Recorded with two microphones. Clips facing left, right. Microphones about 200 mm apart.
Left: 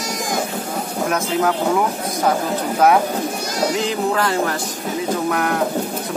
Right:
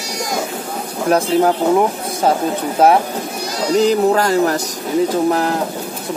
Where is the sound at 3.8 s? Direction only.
40° right (ahead or behind).